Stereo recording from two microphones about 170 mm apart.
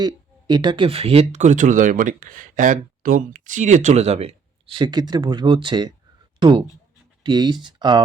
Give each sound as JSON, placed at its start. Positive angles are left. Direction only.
{"t": 0.0, "sound": "speech", "side_deg": -25}